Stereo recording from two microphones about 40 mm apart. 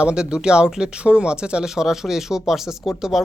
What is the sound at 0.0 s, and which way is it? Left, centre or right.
Speech, right.